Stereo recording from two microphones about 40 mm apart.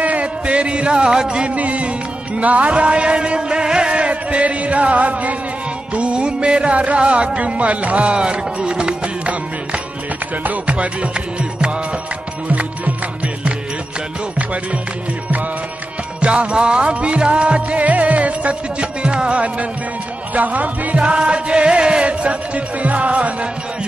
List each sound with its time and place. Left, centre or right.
0.0 s a man's voice: right
1.5 s music: right
16.2 s music: right